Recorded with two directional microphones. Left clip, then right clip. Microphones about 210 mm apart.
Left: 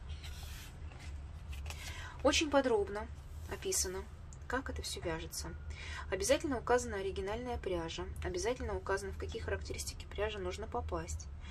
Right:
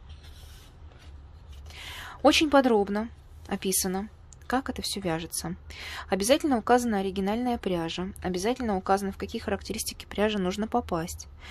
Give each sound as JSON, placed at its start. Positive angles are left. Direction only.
{"t": 2.0, "sound": "a woman's voice", "side_deg": -50}